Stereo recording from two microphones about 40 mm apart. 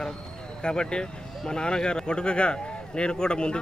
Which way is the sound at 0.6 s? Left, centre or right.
Left.